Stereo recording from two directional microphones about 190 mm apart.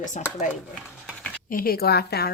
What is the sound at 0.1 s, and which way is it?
Speech, 45° left (ahead or behind).